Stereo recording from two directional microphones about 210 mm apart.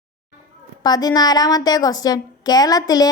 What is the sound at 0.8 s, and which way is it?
A woman's voice, 20° left (ahead or behind).